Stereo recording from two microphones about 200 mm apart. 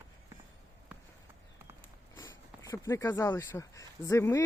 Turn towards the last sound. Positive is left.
turn(degrees=15)  # may be behind; listen again after turning